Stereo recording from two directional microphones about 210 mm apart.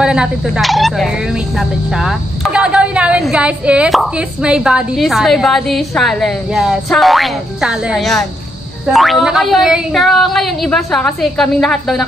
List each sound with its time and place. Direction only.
0.0 s speech: 5° right (ahead or behind)